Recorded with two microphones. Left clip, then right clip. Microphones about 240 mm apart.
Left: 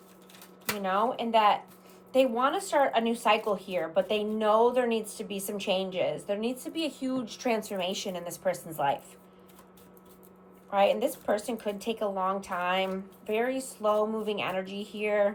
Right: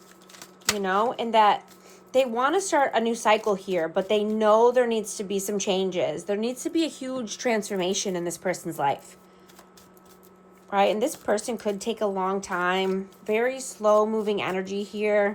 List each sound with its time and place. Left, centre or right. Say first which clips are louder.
0.8 s speech: right 3 dB; right
5.3 s speech: right 9 dB; right
5.5 s speech: right 2 dB; right
10.7 s speech: right 2 dB; right